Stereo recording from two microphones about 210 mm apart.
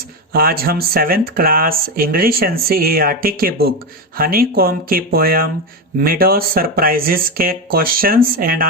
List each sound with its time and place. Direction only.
0.3 s speech: 45° right (ahead or behind)